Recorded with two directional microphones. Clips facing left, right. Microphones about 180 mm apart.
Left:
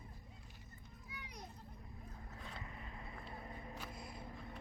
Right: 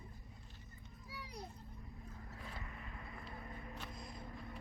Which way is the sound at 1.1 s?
35° right (ahead or behind).